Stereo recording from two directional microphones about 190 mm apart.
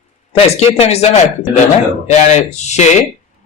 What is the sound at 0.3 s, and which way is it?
A man's voice, 35° left (ahead or behind).